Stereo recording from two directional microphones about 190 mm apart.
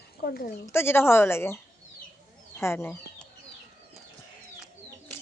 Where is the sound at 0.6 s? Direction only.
10° left (ahead or behind).